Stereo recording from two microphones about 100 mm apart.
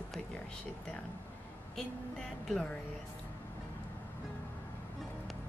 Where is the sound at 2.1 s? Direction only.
5° left (ahead or behind).